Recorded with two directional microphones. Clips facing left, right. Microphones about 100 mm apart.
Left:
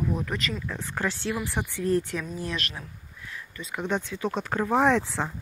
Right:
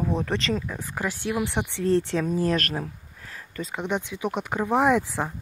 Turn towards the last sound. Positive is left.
turn(degrees=-15)  # may be behind; listen again after turning